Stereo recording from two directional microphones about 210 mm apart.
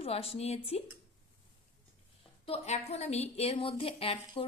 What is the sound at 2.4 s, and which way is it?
Music, 30° left (ahead or behind).